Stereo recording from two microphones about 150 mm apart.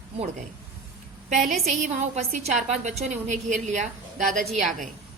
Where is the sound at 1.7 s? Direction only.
50° right (ahead or behind).